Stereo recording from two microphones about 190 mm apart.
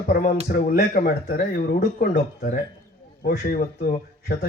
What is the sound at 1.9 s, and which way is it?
Speech, 45° left (ahead or behind).